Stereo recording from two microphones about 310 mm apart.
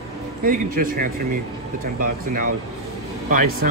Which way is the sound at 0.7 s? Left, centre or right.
Right.